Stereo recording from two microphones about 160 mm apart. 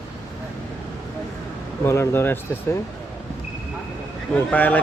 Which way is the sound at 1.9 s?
15° left (ahead or behind).